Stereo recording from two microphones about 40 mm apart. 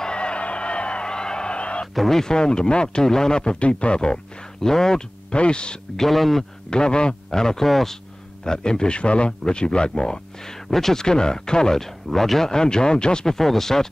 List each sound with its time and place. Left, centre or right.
0.0 s music: left
2.0 s speech: centre
4.6 s speech: centre
5.3 s speech: left
5.9 s speech: centre
6.7 s speech: left
7.3 s speech: centre
8.5 s speech: centre
10.7 s speech: centre